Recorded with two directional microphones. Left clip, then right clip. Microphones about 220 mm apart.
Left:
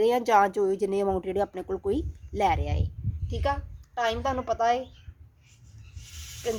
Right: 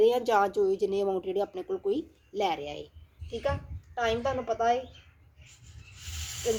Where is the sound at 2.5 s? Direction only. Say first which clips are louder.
Left 4 dB; 85° left.